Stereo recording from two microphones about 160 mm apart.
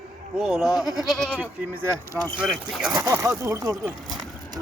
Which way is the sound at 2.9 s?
20° right (ahead or behind).